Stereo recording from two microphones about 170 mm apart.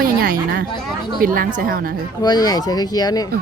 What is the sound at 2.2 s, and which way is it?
Speech, 25° left (ahead or behind).